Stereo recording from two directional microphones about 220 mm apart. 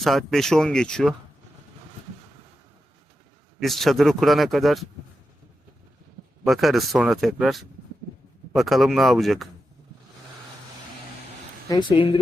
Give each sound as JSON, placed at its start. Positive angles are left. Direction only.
{"t": 0.0, "sound": "a man's voice", "side_deg": 0}
{"t": 3.6, "sound": "a man's voice", "side_deg": 0}
{"t": 6.4, "sound": "a man's voice", "side_deg": 0}
{"t": 11.7, "sound": "speech", "side_deg": 20}